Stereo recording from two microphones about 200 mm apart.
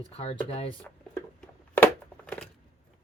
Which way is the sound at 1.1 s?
10° left (ahead or behind).